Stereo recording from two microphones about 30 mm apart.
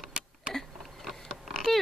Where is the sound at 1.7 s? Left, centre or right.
Centre.